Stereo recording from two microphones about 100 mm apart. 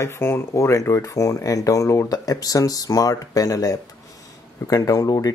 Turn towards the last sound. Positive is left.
turn(degrees=35)  # may be behind; listen again after turning